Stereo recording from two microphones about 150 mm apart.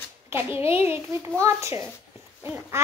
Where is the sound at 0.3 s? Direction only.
15° right (ahead or behind).